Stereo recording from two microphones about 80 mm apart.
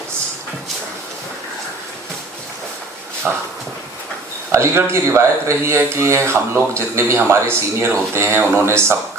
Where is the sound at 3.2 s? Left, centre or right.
Centre.